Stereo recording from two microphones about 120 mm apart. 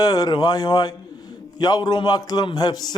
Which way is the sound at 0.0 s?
30° left (ahead or behind).